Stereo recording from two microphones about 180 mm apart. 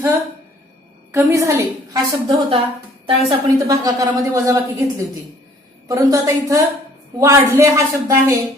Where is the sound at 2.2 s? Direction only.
30° right (ahead or behind).